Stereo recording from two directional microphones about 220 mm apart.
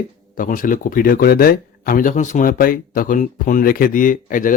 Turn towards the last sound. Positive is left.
turn(degrees=40)  # may be behind; listen again after turning